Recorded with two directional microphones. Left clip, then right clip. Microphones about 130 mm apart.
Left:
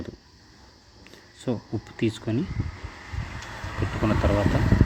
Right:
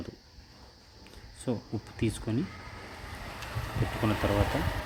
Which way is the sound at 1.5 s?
20° left (ahead or behind).